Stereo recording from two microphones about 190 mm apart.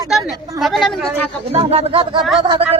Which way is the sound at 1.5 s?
30° right (ahead or behind).